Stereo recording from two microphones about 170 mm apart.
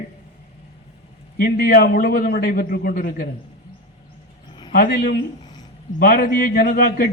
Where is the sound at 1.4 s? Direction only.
65° left (ahead or behind).